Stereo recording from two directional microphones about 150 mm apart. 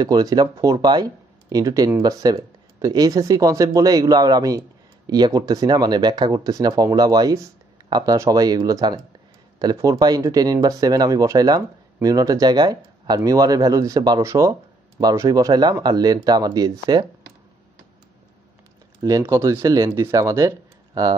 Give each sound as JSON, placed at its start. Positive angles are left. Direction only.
{"t": 0.0, "sound": "speech", "side_deg": -25}
{"t": 19.0, "sound": "speech", "side_deg": -20}